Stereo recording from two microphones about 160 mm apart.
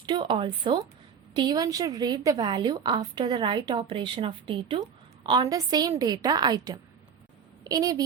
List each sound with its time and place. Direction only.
0.0 s a woman's voice: 30° right (ahead or behind)